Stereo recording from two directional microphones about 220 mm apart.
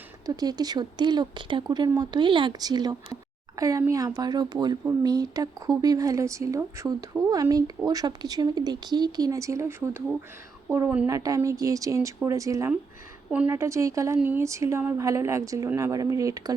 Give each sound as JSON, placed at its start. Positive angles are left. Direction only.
{"t": 0.3, "sound": "speech", "side_deg": -15}